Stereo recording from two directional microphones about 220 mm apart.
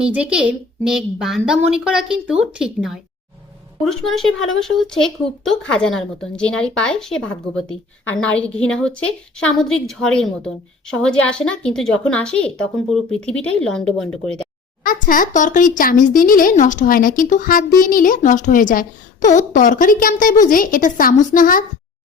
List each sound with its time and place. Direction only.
0.0 s speech: 5° right (ahead or behind)
14.8 s speech: 40° left (ahead or behind)